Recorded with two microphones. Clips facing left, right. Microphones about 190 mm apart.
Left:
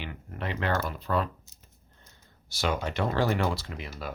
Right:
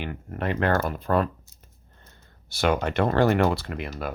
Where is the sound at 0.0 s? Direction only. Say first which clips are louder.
Right 6 dB; 50° right (ahead or behind).